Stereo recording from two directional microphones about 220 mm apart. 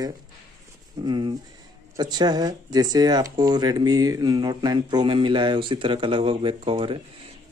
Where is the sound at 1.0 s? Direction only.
20° right (ahead or behind).